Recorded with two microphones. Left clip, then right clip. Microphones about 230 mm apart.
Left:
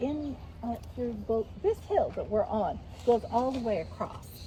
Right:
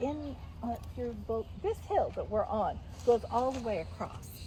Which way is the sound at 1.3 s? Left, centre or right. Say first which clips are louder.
Left 6 dB; right.